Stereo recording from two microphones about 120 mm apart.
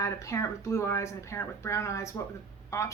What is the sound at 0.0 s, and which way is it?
Speech, 25° left (ahead or behind).